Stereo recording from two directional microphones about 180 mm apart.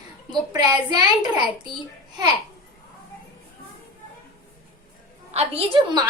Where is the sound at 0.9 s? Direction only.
20° right (ahead or behind).